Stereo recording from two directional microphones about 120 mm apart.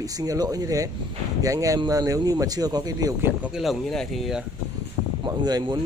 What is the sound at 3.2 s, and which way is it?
Speech, 15° right (ahead or behind).